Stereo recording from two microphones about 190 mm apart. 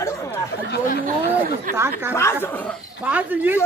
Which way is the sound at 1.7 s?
15° right (ahead or behind).